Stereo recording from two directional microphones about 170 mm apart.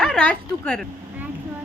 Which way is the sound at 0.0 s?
5° left (ahead or behind).